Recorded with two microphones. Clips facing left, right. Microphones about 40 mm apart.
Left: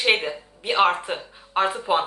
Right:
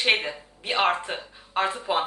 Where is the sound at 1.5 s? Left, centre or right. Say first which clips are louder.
Left 3 dB; left.